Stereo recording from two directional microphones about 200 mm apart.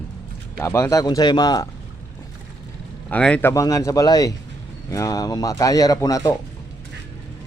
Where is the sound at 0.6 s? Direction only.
15° left (ahead or behind).